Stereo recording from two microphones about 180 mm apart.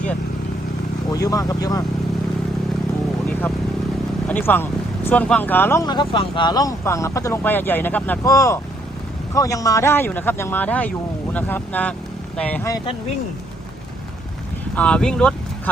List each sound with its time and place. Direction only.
1.1 s speech: 20° left (ahead or behind)
4.3 s speech: 10° left (ahead or behind)
12.7 s speech: 30° left (ahead or behind)
14.8 s speech: 5° left (ahead or behind)